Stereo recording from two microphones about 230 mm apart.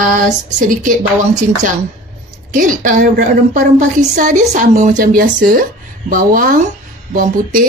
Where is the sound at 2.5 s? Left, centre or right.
Right.